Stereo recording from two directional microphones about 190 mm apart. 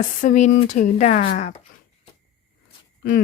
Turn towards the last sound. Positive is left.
turn(degrees=50)  # may be behind; listen again after turning